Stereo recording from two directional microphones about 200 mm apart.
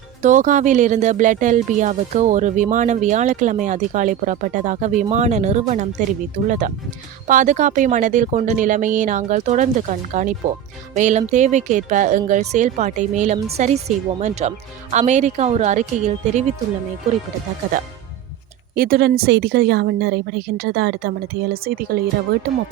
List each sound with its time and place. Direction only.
0.2 s speech: 40° right (ahead or behind)
7.3 s speech: 40° right (ahead or behind)
18.8 s a woman's voice: 50° right (ahead or behind)